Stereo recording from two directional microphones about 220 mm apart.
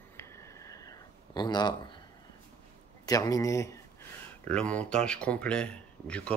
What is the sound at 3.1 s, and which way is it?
Speech, 15° left (ahead or behind).